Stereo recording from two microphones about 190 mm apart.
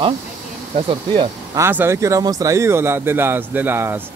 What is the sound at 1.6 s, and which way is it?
Speech, 10° right (ahead or behind).